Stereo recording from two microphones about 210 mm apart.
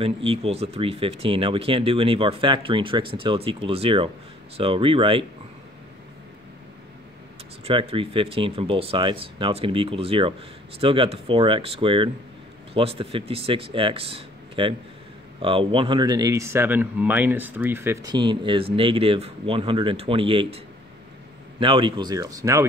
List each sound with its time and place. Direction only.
0.0 s speech: 25° right (ahead or behind)
7.6 s speech: 25° right (ahead or behind)